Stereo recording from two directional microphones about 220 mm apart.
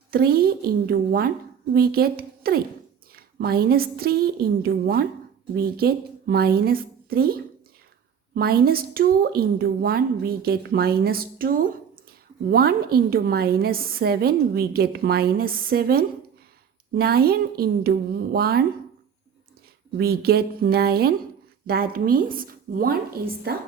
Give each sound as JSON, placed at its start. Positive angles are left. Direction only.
{"t": 0.1, "sound": "a woman's voice", "side_deg": -45}
{"t": 8.4, "sound": "a woman's voice", "side_deg": -45}
{"t": 20.0, "sound": "a woman's voice", "side_deg": -45}